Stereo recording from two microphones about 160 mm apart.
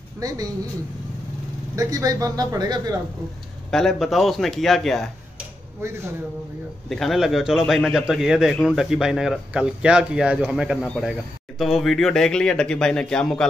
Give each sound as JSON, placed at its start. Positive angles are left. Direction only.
{"t": 0.2, "sound": "speech", "side_deg": -25}
{"t": 1.8, "sound": "speech", "side_deg": -20}
{"t": 3.7, "sound": "a man's voice", "side_deg": 0}
{"t": 5.8, "sound": "speech", "side_deg": -15}
{"t": 6.9, "sound": "a man's voice", "side_deg": 0}